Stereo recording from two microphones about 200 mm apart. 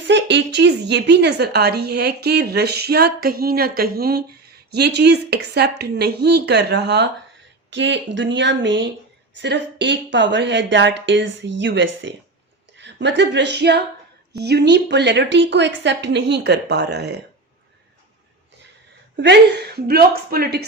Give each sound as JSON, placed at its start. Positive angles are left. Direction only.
{"t": 0.1, "sound": "a woman's voice", "side_deg": -60}
{"t": 19.1, "sound": "a woman's voice", "side_deg": -60}